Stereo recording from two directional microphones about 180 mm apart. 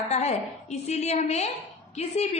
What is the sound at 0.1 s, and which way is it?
A woman's voice, 40° left (ahead or behind).